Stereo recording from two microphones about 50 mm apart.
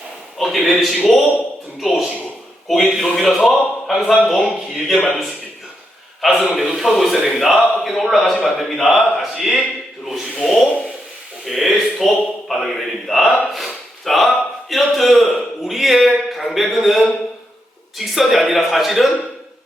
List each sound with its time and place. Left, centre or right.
0.3 s a man's voice: centre
6.4 s a man's voice: centre